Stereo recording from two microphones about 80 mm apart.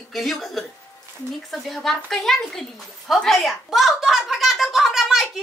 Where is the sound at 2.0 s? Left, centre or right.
Centre.